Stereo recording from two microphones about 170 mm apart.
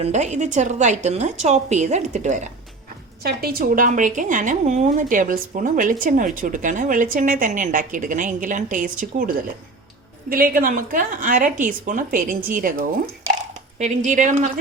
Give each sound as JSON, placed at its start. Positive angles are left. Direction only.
{"t": 0.0, "sound": "a woman's voice", "side_deg": -45}
{"t": 3.2, "sound": "a woman's voice", "side_deg": -60}
{"t": 10.5, "sound": "a woman's voice", "side_deg": -55}
{"t": 13.7, "sound": "a woman's voice", "side_deg": -45}